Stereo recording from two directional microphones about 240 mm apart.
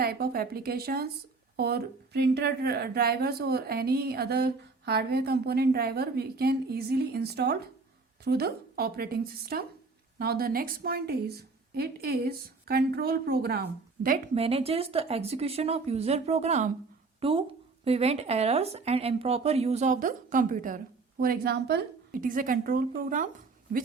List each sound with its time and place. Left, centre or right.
0.0 s speech: right
14.4 s a woman's voice: right